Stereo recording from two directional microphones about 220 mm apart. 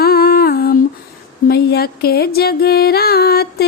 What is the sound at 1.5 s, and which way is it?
Music, 45° left (ahead or behind).